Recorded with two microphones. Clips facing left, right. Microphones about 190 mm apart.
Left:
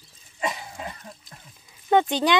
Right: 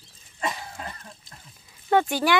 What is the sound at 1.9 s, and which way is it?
Speech, 20° left (ahead or behind).